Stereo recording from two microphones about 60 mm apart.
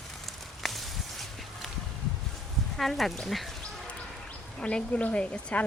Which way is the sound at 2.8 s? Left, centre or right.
Centre.